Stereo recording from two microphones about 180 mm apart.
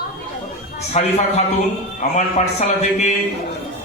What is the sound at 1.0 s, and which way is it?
A man's voice, 40° left (ahead or behind).